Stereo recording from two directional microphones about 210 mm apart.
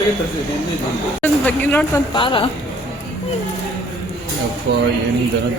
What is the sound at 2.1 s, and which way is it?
Speech, 25° left (ahead or behind).